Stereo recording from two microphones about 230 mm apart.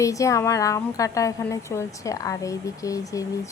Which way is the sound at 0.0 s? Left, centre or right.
Centre.